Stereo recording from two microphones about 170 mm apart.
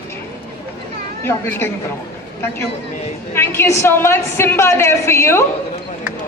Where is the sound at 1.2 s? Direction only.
15° left (ahead or behind).